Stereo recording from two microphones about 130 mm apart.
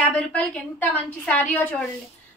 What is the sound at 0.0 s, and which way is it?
A woman's voice, 10° left (ahead or behind).